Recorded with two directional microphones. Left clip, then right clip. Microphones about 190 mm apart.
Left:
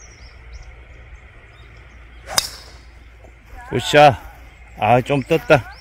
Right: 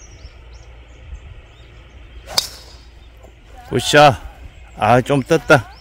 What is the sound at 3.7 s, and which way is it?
Speech, 20° right (ahead or behind).